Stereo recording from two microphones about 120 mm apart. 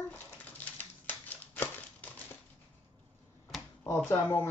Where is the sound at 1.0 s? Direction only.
15° left (ahead or behind).